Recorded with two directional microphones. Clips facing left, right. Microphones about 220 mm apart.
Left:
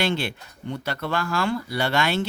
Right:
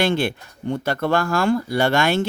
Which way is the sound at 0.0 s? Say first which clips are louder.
Right 5 dB; 50° right (ahead or behind).